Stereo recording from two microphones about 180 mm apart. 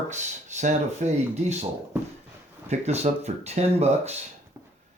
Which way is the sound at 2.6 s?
40° right (ahead or behind).